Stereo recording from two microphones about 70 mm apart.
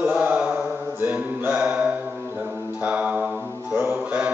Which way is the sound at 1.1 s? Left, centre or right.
Centre.